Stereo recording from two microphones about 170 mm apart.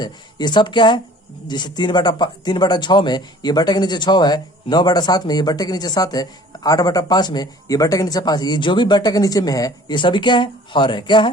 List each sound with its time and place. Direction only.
0.0 s speech: 25° left (ahead or behind)